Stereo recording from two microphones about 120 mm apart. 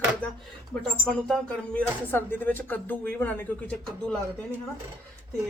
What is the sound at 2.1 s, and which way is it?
Speech, 15° left (ahead or behind).